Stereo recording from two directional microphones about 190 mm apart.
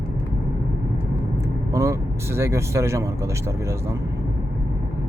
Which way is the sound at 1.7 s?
15° right (ahead or behind).